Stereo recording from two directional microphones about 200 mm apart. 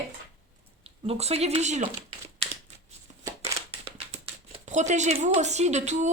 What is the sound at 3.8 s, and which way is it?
Speech, 30° right (ahead or behind).